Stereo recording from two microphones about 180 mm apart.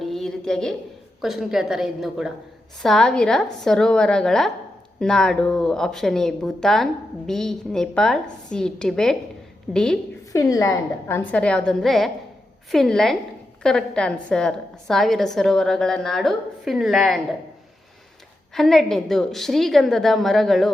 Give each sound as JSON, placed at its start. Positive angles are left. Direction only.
{"t": 0.0, "sound": "a sound", "side_deg": 0}
{"t": 1.2, "sound": "a woman's voice", "side_deg": 0}
{"t": 10.3, "sound": "a woman's voice", "side_deg": 15}
{"t": 18.5, "sound": "a woman's voice", "side_deg": 0}